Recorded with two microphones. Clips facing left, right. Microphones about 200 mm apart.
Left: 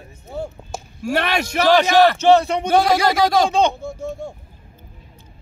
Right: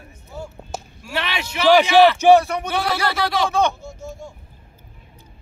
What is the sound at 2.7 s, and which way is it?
Speech, 45° left (ahead or behind).